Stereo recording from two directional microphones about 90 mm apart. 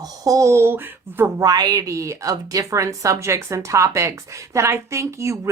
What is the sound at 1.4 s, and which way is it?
Speech, 45° right (ahead or behind).